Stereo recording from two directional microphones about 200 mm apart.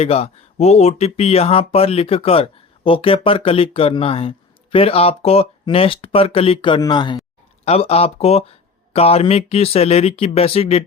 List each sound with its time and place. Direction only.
0.0 s speech: 30° left (ahead or behind)